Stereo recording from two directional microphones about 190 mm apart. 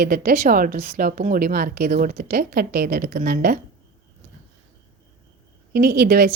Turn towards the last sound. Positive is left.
turn(degrees=-55)  # may be behind; listen again after turning